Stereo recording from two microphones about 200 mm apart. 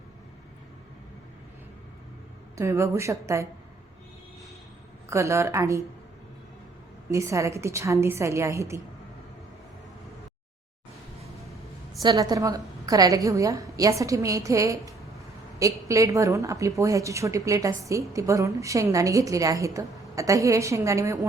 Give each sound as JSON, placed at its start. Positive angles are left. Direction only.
{"t": 2.6, "sound": "a woman's voice", "side_deg": -15}
{"t": 5.0, "sound": "a woman's voice", "side_deg": -15}
{"t": 7.1, "sound": "a woman's voice", "side_deg": -15}
{"t": 12.0, "sound": "a woman's voice", "side_deg": -20}